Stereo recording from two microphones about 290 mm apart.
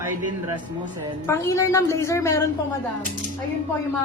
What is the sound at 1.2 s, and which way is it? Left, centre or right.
A woman's voice, centre.